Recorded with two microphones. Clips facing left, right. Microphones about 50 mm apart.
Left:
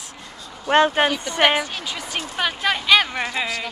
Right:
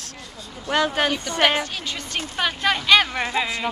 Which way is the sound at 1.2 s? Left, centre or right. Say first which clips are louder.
Left 2 dB; centre.